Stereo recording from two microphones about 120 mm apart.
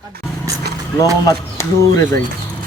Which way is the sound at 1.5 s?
20° left (ahead or behind).